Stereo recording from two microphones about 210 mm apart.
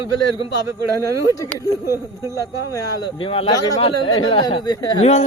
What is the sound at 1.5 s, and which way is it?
A man's voice, 15° left (ahead or behind).